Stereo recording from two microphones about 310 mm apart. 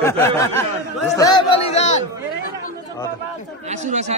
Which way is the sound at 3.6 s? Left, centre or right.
Right.